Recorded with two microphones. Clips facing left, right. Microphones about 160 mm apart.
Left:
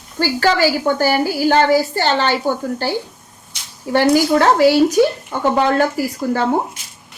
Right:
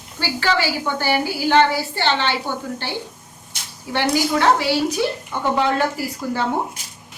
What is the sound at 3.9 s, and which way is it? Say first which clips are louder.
A woman's voice: left 6 dB; 40° left (ahead or behind).